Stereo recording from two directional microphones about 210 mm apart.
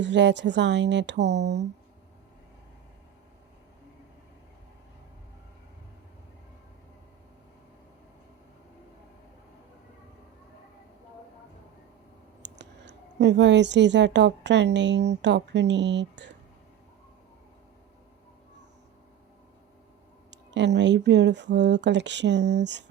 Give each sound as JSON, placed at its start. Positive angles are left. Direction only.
{"t": 0.0, "sound": "speech", "side_deg": -55}
{"t": 12.5, "sound": "a woman's voice", "side_deg": -55}
{"t": 20.3, "sound": "speech", "side_deg": -55}